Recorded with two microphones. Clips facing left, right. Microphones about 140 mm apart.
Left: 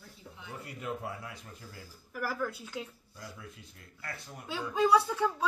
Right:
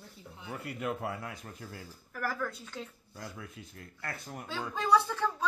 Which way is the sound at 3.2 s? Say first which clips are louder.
Right 3 dB; 55° right (ahead or behind).